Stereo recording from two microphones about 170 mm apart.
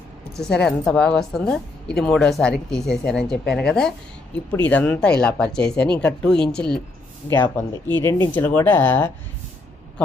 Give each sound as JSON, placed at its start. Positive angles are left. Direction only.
{"t": 0.4, "sound": "a woman's voice", "side_deg": 5}